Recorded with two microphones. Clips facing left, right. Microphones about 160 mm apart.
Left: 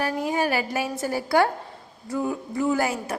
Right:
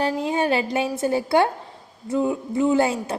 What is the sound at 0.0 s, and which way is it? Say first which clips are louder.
A woman's voice: right 2 dB; 25° right (ahead or behind).